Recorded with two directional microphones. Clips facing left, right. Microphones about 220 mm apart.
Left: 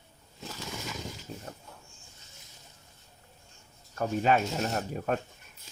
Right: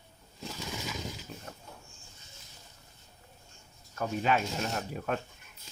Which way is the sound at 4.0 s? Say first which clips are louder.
Left 3 dB; 45° left (ahead or behind).